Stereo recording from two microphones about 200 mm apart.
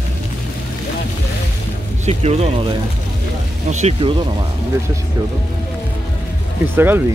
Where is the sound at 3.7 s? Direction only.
35° right (ahead or behind).